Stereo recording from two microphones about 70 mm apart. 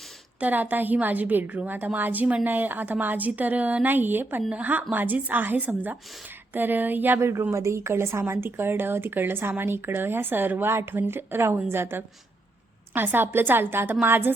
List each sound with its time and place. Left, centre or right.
0.3 s a woman's voice: right
7.2 s a woman's voice: right